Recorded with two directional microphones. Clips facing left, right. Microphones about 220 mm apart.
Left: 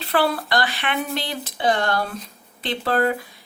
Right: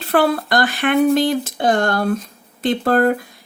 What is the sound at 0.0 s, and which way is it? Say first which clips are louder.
Speech: right 5 dB; 45° right (ahead or behind).